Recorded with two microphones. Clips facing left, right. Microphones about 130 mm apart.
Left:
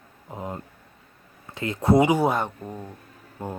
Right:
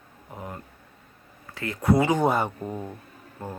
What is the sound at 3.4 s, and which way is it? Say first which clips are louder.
Speech: left 3 dB; 20° left (ahead or behind).